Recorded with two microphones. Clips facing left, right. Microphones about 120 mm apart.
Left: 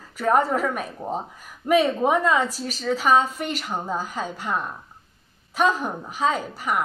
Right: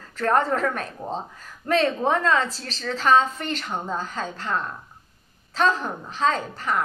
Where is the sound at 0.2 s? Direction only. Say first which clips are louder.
Left 1 dB; 10° left (ahead or behind).